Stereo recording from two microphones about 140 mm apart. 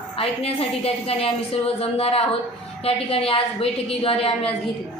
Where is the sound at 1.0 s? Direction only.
45° left (ahead or behind).